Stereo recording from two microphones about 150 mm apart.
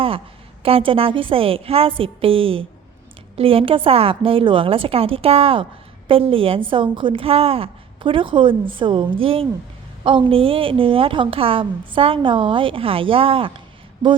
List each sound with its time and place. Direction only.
0.6 s a woman's voice: 35° right (ahead or behind)